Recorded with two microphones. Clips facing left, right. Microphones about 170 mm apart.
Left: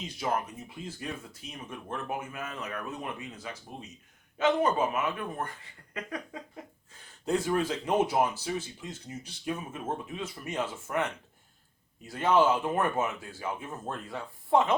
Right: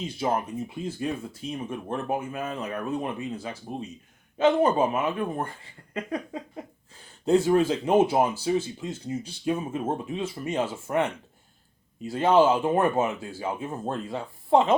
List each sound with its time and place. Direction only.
0.0 s speech: 30° right (ahead or behind)